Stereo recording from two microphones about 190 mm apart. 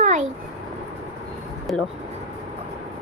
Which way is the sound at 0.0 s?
40° right (ahead or behind).